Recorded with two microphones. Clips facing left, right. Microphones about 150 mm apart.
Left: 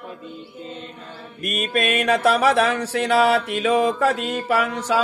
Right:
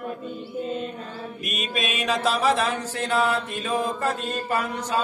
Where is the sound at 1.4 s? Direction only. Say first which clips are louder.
Left 7 dB; 55° left (ahead or behind); by 4.3 s 80° left.